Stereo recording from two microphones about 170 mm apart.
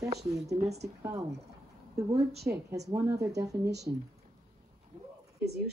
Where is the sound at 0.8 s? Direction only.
20° right (ahead or behind).